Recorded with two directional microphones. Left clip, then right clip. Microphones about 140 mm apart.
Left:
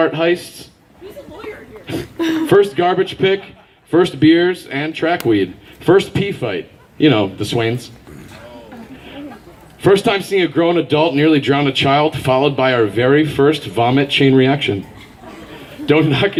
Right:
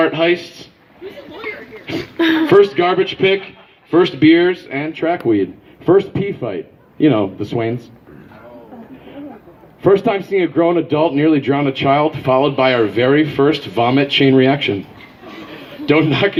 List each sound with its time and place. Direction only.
0.0 s speech: 35° right (ahead or behind)
2.1 s speech: 50° right (ahead or behind)
2.5 s speech: 35° right (ahead or behind)
9.8 s speech: 30° right (ahead or behind)
15.9 s speech: 35° right (ahead or behind)